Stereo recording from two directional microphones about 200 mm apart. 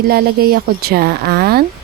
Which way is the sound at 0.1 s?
50° right (ahead or behind).